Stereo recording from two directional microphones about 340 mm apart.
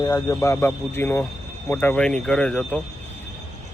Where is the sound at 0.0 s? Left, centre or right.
Centre.